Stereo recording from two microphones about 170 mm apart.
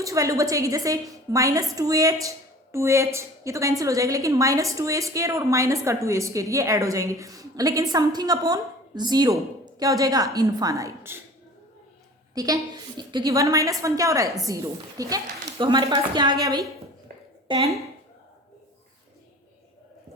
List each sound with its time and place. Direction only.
0.0 s a woman's voice: 20° right (ahead or behind)
12.3 s a woman's voice: 20° right (ahead or behind)